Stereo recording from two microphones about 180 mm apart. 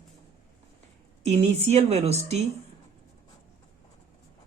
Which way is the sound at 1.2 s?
40° right (ahead or behind).